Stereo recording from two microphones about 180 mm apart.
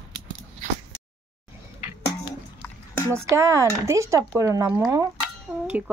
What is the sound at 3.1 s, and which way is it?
Speech, 15° right (ahead or behind).